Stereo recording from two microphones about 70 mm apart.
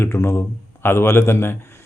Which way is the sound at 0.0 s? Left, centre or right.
Left.